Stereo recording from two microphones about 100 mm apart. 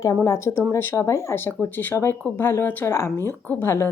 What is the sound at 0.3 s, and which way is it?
Speech, 25° left (ahead or behind).